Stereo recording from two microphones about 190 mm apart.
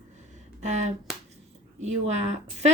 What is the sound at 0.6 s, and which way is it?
A woman's voice, 35° right (ahead or behind).